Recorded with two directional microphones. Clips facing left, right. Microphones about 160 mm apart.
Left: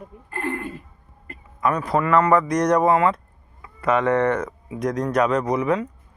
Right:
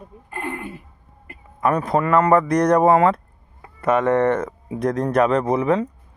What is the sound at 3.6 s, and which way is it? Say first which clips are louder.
Speech: right 2 dB; 45° right (ahead or behind).